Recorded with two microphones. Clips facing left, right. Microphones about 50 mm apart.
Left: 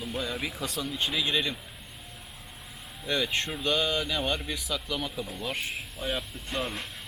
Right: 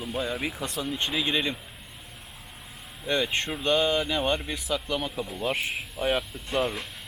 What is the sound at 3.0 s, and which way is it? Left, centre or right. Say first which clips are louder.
Speech: right 2 dB; centre.